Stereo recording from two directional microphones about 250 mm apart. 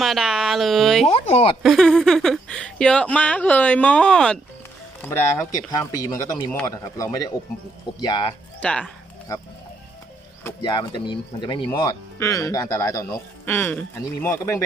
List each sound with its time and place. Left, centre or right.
0.0 s speech: centre
1.1 s speech: left
1.6 s speech: centre
5.7 s speech: centre
8.6 s speech: centre